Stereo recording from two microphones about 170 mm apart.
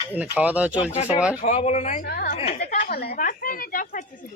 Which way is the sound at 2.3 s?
40° left (ahead or behind).